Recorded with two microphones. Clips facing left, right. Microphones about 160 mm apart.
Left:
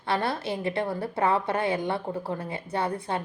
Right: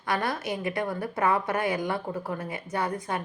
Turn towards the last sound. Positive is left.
turn(degrees=30)  # may be behind; listen again after turning